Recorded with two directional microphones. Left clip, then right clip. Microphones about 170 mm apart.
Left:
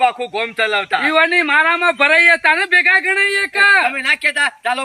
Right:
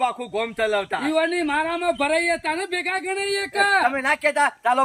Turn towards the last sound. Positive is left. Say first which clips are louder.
# left 2 dB
turn(degrees=-20)  # may be behind; listen again after turning